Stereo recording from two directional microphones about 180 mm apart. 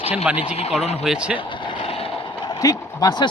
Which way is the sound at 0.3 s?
35° left (ahead or behind).